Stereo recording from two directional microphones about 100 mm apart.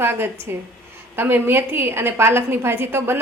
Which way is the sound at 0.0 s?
25° right (ahead or behind).